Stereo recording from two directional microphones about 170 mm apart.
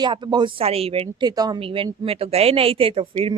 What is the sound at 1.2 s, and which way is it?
A woman's voice, 25° right (ahead or behind).